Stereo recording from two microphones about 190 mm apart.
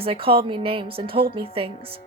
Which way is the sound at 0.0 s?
30° right (ahead or behind).